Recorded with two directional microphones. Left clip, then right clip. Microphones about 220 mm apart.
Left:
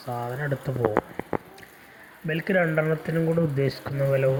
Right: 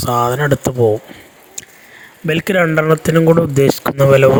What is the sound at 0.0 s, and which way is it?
Speech, 55° right (ahead or behind).